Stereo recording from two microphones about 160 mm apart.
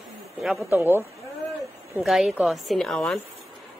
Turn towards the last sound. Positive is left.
turn(degrees=5)  # may be behind; listen again after turning